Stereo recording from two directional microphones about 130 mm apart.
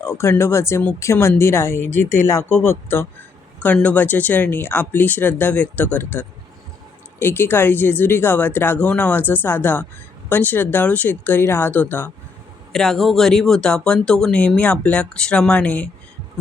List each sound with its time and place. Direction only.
0.0 s speech: 20° left (ahead or behind)
12.7 s speech: 5° left (ahead or behind)